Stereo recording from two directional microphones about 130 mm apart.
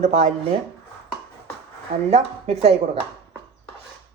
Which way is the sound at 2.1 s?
50° right (ahead or behind).